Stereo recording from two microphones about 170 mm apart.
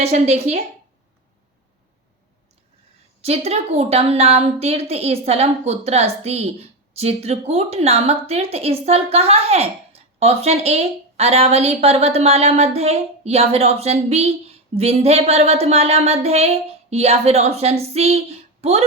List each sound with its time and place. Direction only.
0.0 s a woman's voice: 40° right (ahead or behind)
3.2 s a woman's voice: 35° right (ahead or behind)